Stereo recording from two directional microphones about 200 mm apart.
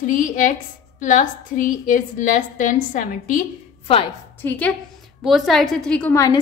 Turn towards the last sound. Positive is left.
turn(degrees=10)  # may be behind; listen again after turning